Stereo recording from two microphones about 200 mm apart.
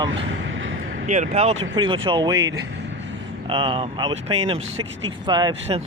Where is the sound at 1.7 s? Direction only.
25° right (ahead or behind).